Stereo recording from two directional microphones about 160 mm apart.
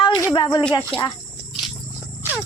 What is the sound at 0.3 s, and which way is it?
Speech, 30° left (ahead or behind).